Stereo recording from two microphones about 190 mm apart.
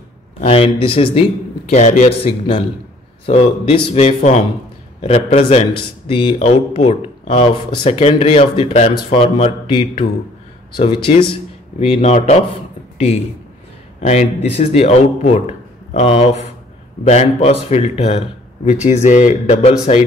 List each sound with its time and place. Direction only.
0.4 s speech: 30° left (ahead or behind)
1.7 s a man's voice: 40° left (ahead or behind)
14.0 s a man's voice: 35° left (ahead or behind)